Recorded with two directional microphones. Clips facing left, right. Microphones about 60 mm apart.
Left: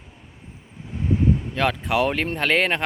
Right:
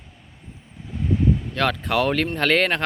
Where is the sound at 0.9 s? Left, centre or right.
Centre.